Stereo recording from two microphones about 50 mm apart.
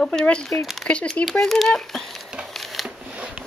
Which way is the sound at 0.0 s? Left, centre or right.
Centre.